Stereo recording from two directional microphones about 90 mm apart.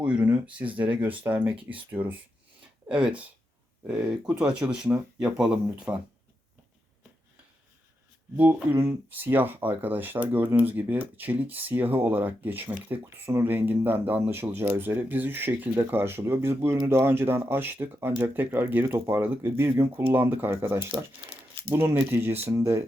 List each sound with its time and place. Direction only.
0.0 s speech: 15° right (ahead or behind)
8.9 s speech: 20° right (ahead or behind)
21.2 s crumpling: 90° right
21.8 s speech: 25° right (ahead or behind)